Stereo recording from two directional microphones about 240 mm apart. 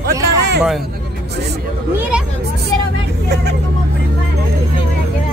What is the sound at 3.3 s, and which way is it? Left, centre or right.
Speech, right.